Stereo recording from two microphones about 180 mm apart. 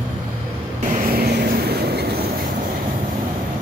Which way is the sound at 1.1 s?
60° right (ahead or behind).